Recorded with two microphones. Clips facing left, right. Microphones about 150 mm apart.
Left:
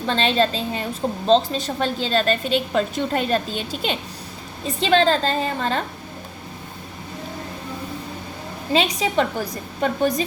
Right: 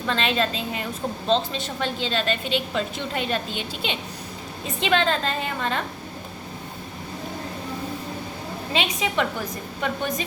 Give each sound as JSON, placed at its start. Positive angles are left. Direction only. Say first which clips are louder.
{"t": 0.1, "sound": "a woman's voice", "louder": "left 4 dB", "side_deg": 30}
{"t": 8.7, "sound": "a woman's voice", "louder": "left 5 dB", "side_deg": 35}